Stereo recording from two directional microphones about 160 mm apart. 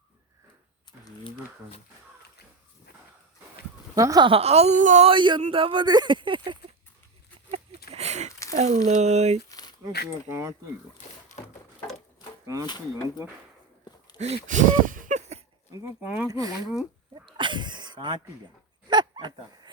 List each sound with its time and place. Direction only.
3.9 s speech: 20° right (ahead or behind)
4.3 s speech: 40° right (ahead or behind)
5.0 s speech: 30° right (ahead or behind)
7.9 s a sound: 45° right (ahead or behind)
8.4 s speech: 50° right (ahead or behind)
9.5 s crumpling: 25° left (ahead or behind)
10.2 s speech: 15° right (ahead or behind)
12.6 s speech: 25° left (ahead or behind)
14.2 s speech: 45° right (ahead or behind)
15.7 s speech: 15° right (ahead or behind)
17.3 s a sound: 30° right (ahead or behind)
18.9 s bow-wow: 25° right (ahead or behind)